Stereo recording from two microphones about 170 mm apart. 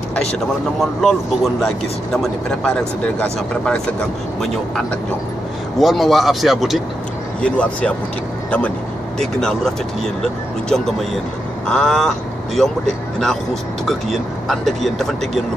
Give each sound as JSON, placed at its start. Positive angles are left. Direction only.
{"t": 0.7, "sound": "speech", "side_deg": 0}
{"t": 5.8, "sound": "speech", "side_deg": 0}